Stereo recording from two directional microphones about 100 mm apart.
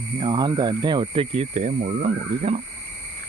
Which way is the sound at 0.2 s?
45° right (ahead or behind).